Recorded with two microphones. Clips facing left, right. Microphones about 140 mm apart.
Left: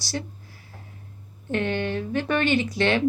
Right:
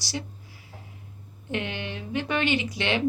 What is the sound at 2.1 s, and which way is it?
Speech, 15° right (ahead or behind).